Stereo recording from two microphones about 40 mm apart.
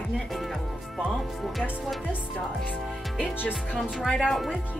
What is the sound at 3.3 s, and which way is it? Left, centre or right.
Speech, left.